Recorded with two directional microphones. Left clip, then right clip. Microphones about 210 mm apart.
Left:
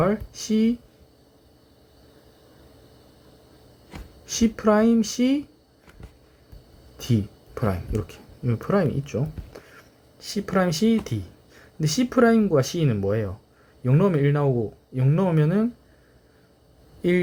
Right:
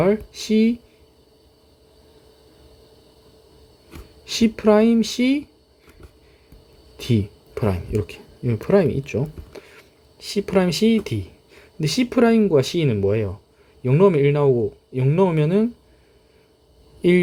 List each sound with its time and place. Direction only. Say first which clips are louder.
0.0 s speech: right 4 dB; 25° right (ahead or behind)
4.3 s speech: right 4 dB; 25° right (ahead or behind)
6.9 s speech: right 4 dB; 25° right (ahead or behind)